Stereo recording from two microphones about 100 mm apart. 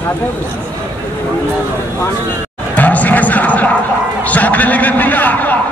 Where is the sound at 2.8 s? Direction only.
15° left (ahead or behind).